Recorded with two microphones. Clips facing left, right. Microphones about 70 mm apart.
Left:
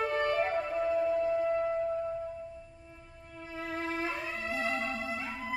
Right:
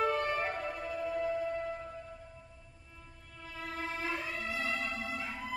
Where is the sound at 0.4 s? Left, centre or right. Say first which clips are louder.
Left 6 dB; left.